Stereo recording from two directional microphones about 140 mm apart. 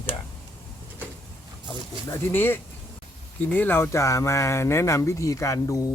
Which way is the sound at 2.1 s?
15° left (ahead or behind).